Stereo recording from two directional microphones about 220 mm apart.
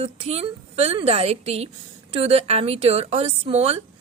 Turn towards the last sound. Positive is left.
turn(degrees=-30)  # may be behind; listen again after turning